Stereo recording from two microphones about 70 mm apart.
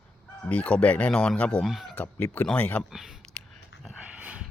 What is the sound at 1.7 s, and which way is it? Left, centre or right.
Speech, centre.